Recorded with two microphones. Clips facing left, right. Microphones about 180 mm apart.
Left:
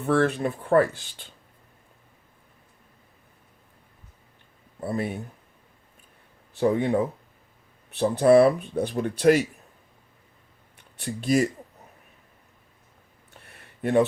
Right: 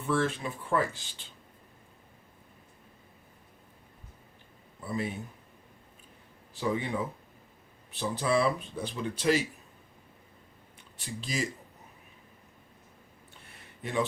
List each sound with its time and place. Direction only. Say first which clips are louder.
0.0 s speech: left 7 dB; 60° left (ahead or behind)
4.8 s speech: left 5 dB; 60° left (ahead or behind)
6.6 s speech: left 9 dB; 60° left (ahead or behind)
11.0 s speech: left 12 dB; 60° left (ahead or behind)